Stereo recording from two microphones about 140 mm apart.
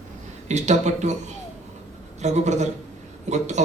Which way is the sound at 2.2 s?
55° right (ahead or behind).